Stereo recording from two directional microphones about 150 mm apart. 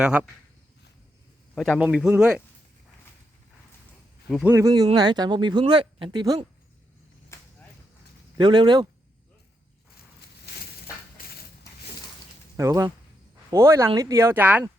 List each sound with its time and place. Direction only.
0.0 s speech: 5° right (ahead or behind)
1.5 s a man's voice: centre (ahead or behind)
4.4 s speech: 20° right (ahead or behind); by 6.1 s 35° right (ahead or behind)
6.1 s speech: 25° right (ahead or behind)
7.3 s a sound: 20° left (ahead or behind)
8.4 s speech: 30° right (ahead or behind)
10.2 s a sound: 90° left
12.5 s speech: 20° right (ahead or behind)